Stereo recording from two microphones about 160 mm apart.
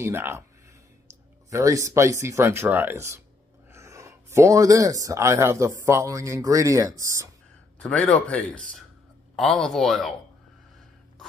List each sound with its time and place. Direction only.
0.0 s speech: 15° right (ahead or behind)
1.5 s speech: 20° right (ahead or behind)
7.8 s speech: 10° left (ahead or behind)